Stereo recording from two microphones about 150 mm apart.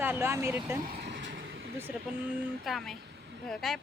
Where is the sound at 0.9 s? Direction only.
90° right.